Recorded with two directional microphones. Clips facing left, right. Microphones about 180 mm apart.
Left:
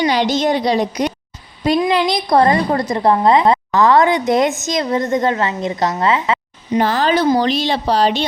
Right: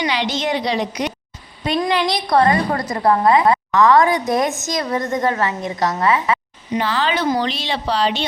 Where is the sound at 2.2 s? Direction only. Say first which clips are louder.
Left 1 dB; 30° left (ahead or behind).